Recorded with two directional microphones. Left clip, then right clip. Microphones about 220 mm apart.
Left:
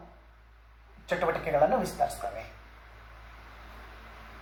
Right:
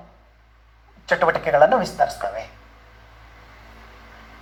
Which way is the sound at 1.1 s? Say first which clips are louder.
Right 10 dB; 45° right (ahead or behind).